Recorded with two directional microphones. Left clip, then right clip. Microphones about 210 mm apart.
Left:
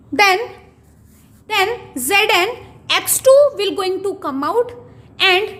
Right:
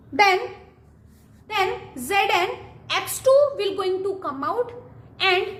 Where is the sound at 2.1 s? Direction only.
45° left (ahead or behind).